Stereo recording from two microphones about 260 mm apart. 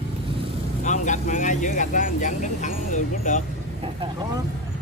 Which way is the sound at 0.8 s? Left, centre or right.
Left.